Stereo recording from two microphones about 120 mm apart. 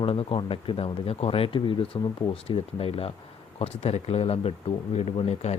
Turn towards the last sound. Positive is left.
turn(degrees=60)  # may be behind; listen again after turning